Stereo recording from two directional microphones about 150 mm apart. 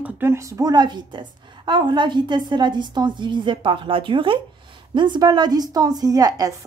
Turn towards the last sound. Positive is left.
turn(degrees=-25)  # may be behind; listen again after turning